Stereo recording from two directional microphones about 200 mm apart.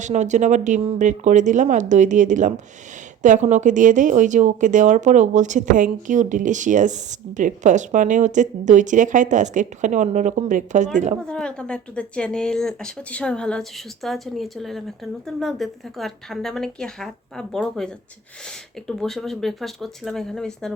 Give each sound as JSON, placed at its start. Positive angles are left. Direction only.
{"t": 0.0, "sound": "speech", "side_deg": -35}
{"t": 11.3, "sound": "speech", "side_deg": 5}